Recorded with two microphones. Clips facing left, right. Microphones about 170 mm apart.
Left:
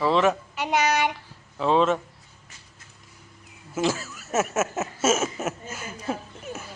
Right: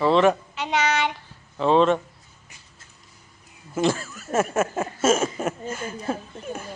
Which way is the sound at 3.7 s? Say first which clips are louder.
Right 3 dB; 5° left (ahead or behind).